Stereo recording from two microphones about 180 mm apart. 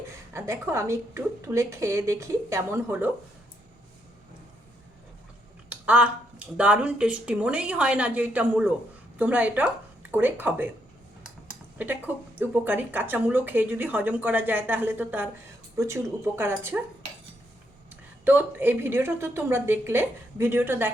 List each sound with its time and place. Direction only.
0.3 s speech: 15° right (ahead or behind)
5.6 s a sound: 5° right (ahead or behind)
6.6 s speech: 5° right (ahead or behind)
18.3 s speech: 10° right (ahead or behind)